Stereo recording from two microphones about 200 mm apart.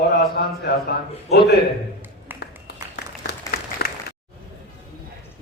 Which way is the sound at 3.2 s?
50° left (ahead or behind).